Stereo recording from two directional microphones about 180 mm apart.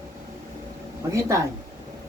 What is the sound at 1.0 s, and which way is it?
Speech, 15° right (ahead or behind).